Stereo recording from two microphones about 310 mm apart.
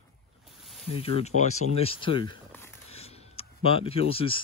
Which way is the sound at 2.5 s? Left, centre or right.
Centre.